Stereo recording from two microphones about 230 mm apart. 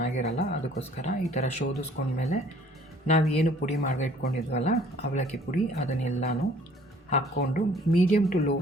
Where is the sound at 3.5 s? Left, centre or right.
Left.